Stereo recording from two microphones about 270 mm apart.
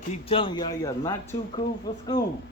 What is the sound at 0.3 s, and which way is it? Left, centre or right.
Speech, centre.